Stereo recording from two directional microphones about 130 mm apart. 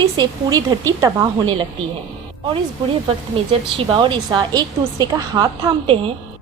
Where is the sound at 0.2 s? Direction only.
30° right (ahead or behind).